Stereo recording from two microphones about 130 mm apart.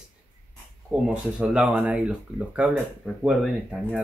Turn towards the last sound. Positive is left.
turn(degrees=-5)  # may be behind; listen again after turning